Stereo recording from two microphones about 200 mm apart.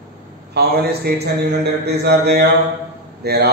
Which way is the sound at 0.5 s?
55° right (ahead or behind).